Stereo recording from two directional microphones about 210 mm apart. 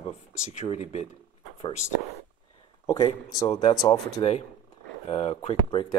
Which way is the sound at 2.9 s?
25° left (ahead or behind).